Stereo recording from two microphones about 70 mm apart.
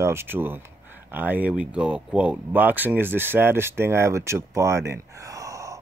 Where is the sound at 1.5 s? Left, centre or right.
Centre.